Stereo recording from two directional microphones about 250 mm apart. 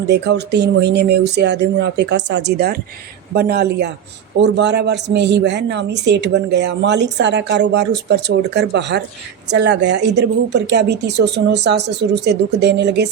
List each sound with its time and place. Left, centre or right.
0.1 s speech: right